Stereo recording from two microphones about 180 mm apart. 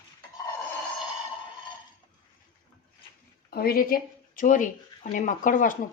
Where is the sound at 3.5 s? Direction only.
55° left (ahead or behind).